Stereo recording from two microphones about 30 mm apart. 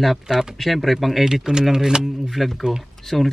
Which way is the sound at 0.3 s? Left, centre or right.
Centre.